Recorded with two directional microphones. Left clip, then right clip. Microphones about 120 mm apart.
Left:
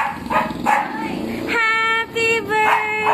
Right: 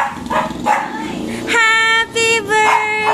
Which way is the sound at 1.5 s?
15° right (ahead or behind).